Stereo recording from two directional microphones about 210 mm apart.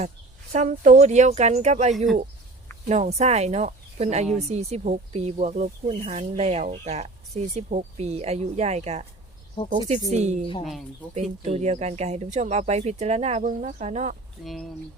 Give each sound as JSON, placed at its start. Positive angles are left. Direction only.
{"t": 0.5, "sound": "speech", "side_deg": -35}
{"t": 10.6, "sound": "speech", "side_deg": 0}
{"t": 11.1, "sound": "speech", "side_deg": -30}
{"t": 14.4, "sound": "speech", "side_deg": 0}